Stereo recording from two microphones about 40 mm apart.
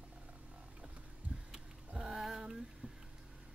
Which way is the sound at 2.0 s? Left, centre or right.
Centre.